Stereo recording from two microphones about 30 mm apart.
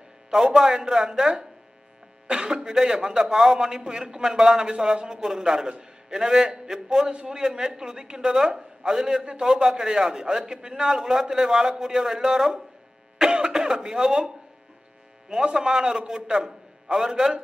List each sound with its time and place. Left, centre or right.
0.3 s a man's voice: centre
8.5 s speech: centre
9.2 s a man's voice: right
9.5 s a man's voice: centre
13.2 s speech: right
15.4 s a man's voice: right